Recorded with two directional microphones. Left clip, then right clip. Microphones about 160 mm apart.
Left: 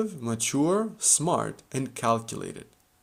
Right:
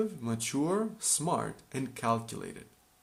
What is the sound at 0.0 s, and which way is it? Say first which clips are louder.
Speech: left 4 dB; 40° left (ahead or behind).